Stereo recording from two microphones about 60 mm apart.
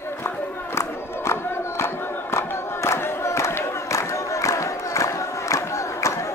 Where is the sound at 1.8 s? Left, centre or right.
Left.